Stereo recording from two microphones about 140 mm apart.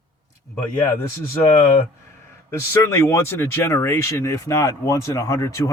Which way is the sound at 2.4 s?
20° left (ahead or behind).